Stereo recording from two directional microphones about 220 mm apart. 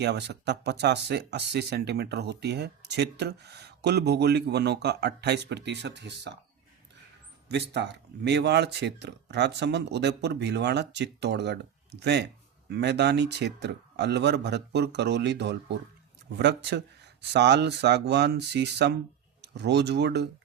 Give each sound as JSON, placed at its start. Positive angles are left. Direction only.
{"t": 0.0, "sound": "speech", "side_deg": -50}
{"t": 7.4, "sound": "speech", "side_deg": -50}